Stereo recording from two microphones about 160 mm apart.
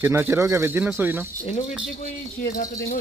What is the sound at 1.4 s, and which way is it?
Speech, 50° left (ahead or behind).